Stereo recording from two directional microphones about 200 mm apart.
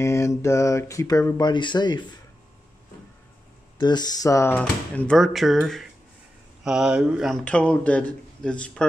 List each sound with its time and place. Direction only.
0.0 s speech: 15° left (ahead or behind)
3.7 s a man's voice: 20° left (ahead or behind); by 8.8 s 5° left (ahead or behind)